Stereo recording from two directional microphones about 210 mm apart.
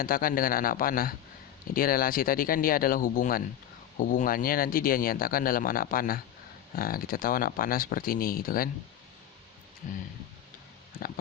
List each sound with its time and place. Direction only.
0.0 s speech: 40° left (ahead or behind)